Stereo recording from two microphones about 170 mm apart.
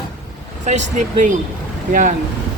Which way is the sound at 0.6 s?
45° right (ahead or behind).